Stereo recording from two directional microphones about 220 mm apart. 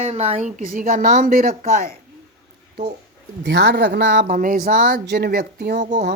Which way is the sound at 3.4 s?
50° right (ahead or behind).